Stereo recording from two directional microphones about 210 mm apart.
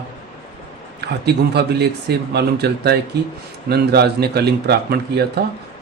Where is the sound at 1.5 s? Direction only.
50° right (ahead or behind).